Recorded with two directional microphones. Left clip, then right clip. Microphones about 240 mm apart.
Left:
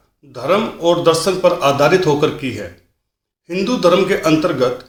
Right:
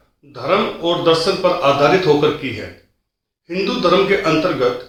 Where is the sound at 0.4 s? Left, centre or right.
Left.